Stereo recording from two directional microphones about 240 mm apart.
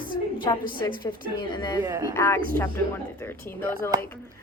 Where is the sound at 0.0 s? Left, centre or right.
Centre.